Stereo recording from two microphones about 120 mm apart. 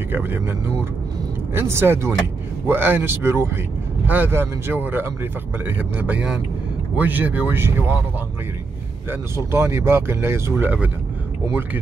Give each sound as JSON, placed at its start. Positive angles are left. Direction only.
{"t": 0.1, "sound": "speech", "side_deg": -15}
{"t": 9.1, "sound": "speech", "side_deg": -20}